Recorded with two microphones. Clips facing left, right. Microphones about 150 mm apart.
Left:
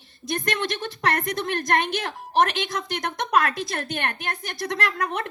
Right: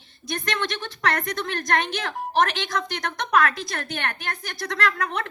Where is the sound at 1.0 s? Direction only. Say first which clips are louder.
Left 1 dB; 25° left (ahead or behind).